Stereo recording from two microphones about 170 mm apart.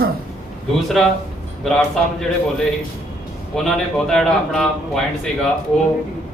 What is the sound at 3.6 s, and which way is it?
Speech, 5° left (ahead or behind).